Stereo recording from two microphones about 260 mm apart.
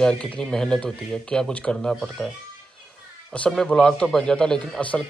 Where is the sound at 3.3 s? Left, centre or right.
Centre.